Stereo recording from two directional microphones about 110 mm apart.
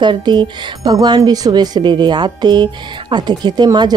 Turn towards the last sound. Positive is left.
turn(degrees=-40)  # may be behind; listen again after turning